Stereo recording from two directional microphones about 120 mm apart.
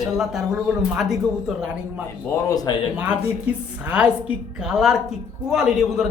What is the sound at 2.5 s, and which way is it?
Speech, 30° left (ahead or behind).